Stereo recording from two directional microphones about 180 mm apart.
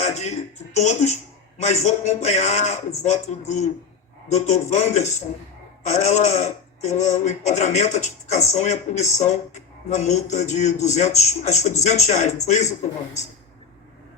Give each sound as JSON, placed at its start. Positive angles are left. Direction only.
{"t": 0.0, "sound": "music", "side_deg": 40}
{"t": 0.8, "sound": "speech", "side_deg": 40}